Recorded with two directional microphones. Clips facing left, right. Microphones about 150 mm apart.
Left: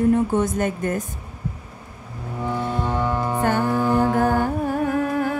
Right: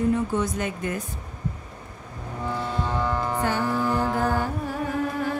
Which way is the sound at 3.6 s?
15° left (ahead or behind).